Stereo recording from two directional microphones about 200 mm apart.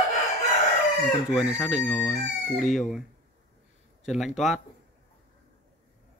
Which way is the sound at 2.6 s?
40° left (ahead or behind).